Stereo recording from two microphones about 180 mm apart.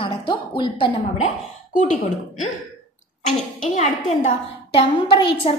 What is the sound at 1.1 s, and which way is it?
Speech, 40° left (ahead or behind).